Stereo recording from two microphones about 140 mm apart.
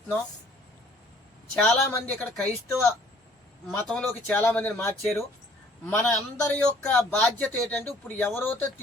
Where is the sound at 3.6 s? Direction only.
10° left (ahead or behind).